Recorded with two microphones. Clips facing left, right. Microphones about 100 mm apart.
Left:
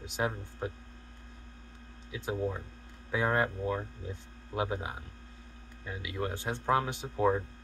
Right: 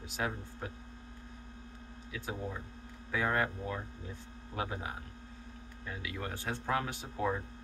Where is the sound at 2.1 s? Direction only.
20° left (ahead or behind).